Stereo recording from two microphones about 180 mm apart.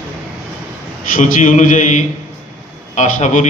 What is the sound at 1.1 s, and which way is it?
A man's voice, 45° left (ahead or behind).